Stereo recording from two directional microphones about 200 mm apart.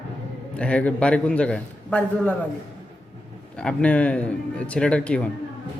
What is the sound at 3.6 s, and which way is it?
Speech, 5° left (ahead or behind).